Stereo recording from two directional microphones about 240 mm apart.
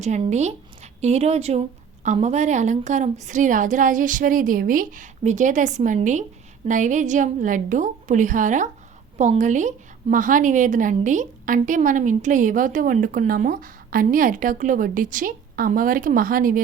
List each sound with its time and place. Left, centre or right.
0.0 s a woman's voice: right